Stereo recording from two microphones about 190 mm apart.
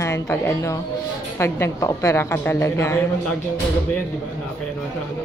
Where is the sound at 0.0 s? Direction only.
15° left (ahead or behind).